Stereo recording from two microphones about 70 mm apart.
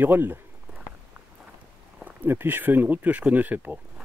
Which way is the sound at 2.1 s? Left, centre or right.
Right.